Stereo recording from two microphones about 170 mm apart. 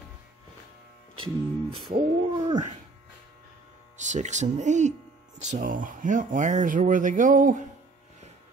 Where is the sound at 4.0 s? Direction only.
45° right (ahead or behind).